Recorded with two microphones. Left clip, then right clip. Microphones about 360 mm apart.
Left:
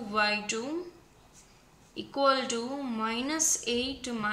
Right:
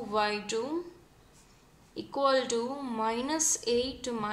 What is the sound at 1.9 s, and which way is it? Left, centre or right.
A woman's voice, centre.